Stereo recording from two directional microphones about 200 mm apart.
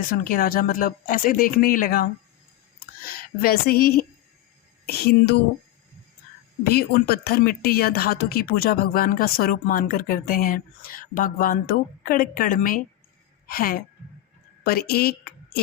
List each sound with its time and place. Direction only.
0.3 s speech: 45° left (ahead or behind)
6.7 s a woman's voice: 50° left (ahead or behind)